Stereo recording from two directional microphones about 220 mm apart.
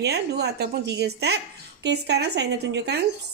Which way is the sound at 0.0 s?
50° right (ahead or behind).